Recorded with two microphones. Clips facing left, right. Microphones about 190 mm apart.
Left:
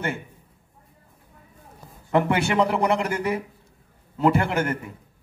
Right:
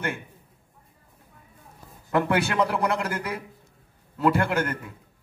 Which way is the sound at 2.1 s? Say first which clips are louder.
Left 2 dB; 20° left (ahead or behind).